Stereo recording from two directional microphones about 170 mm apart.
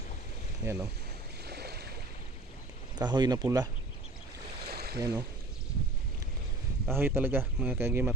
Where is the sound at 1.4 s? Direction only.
70° right (ahead or behind).